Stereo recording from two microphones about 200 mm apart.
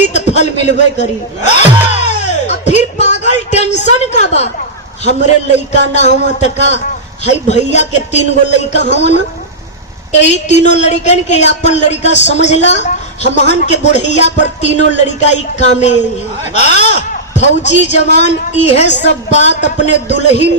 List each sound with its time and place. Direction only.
0.1 s a woman's voice: 35° left (ahead or behind)
1.5 s a sound: 35° left (ahead or behind)
5.9 s a woman's voice: 35° left (ahead or behind)